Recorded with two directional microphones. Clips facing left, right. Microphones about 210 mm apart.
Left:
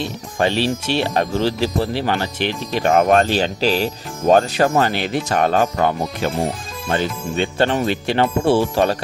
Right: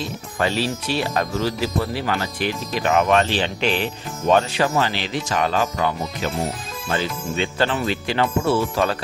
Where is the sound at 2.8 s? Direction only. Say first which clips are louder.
Left 3 dB; 45° left (ahead or behind).